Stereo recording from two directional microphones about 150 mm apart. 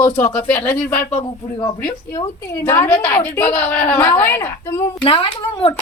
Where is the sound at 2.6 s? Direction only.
15° left (ahead or behind).